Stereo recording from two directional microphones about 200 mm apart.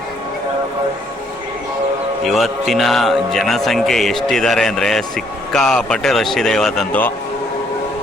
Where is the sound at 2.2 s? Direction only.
Centre (ahead or behind).